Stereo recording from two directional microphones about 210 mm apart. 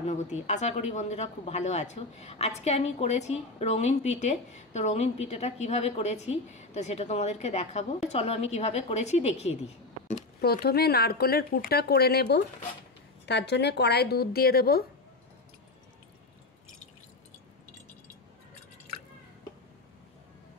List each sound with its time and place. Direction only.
0.0 s speech: 35° left (ahead or behind)
10.4 s speech: 45° left (ahead or behind)